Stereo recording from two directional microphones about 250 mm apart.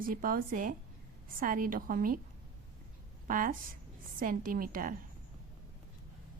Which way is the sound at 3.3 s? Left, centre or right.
Right.